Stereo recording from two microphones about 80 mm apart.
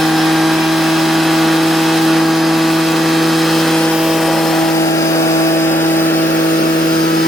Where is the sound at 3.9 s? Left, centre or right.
Centre.